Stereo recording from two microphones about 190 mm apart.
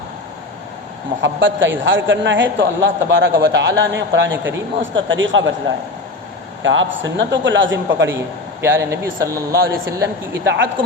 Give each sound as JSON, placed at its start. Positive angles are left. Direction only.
{"t": 1.2, "sound": "a man's voice", "side_deg": -80}
{"t": 6.6, "sound": "a man's voice", "side_deg": -85}
{"t": 8.6, "sound": "a man's voice", "side_deg": -15}
{"t": 10.4, "sound": "a man's voice", "side_deg": -70}